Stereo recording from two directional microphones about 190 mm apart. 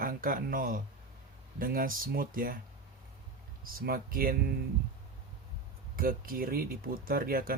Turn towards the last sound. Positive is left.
turn(degrees=-50)  # may be behind; listen again after turning